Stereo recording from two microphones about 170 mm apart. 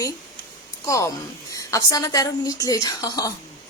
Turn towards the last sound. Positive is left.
turn(degrees=20)  # may be behind; listen again after turning